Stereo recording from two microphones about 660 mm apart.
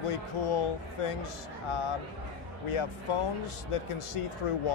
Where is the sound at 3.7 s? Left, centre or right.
Left.